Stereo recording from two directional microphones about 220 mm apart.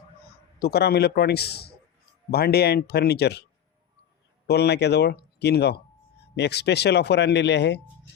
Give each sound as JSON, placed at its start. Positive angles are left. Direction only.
{"t": 0.6, "sound": "speech", "side_deg": 45}
{"t": 4.4, "sound": "speech", "side_deg": 50}